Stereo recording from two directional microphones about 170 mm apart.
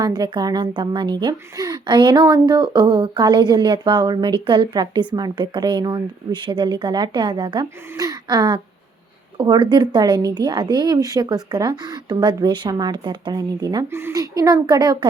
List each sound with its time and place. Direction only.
0.0 s a woman's voice: 25° right (ahead or behind)